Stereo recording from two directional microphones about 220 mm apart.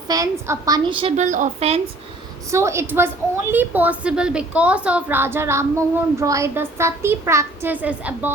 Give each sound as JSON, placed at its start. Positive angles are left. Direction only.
{"t": 0.1, "sound": "a woman's voice", "side_deg": -15}
{"t": 2.5, "sound": "a woman's voice", "side_deg": -10}